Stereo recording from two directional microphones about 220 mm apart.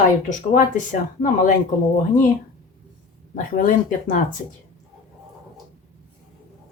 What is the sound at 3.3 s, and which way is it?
Speech, 40° left (ahead or behind).